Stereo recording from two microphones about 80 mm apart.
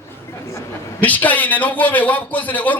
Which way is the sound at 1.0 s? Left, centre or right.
Left.